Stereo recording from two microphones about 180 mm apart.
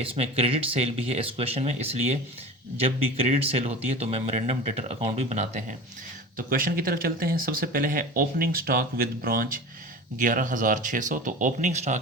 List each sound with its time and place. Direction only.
0.0 s speech: 30° right (ahead or behind)
6.3 s speech: 50° right (ahead or behind)